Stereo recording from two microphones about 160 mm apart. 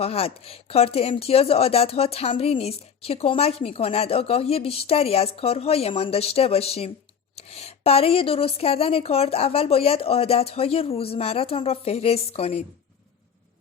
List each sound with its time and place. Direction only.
0.0 s speech: 40° left (ahead or behind)